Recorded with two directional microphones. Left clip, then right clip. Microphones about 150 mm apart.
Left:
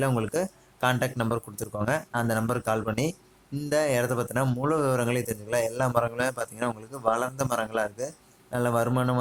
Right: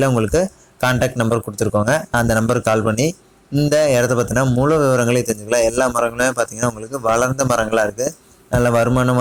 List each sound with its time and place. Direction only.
0.0 s a man's voice: 20° right (ahead or behind)